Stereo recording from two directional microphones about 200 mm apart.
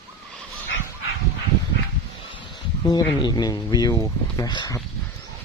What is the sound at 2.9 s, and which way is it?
Speech, 20° left (ahead or behind).